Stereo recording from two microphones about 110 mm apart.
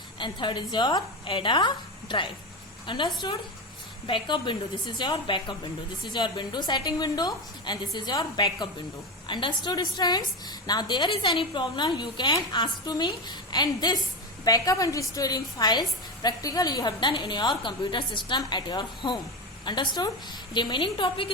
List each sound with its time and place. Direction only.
0.2 s a woman's voice: 45° left (ahead or behind)